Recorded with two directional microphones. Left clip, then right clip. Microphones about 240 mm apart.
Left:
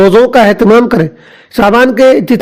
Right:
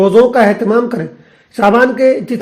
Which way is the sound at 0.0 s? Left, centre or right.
Left.